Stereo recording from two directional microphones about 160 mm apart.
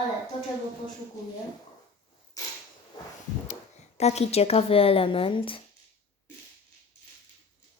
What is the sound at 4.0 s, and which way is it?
Speech, 40° left (ahead or behind).